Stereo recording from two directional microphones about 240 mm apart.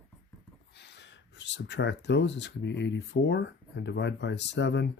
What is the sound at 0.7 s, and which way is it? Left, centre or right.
Speech, left.